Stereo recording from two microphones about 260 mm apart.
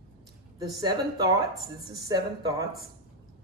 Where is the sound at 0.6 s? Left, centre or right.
Centre.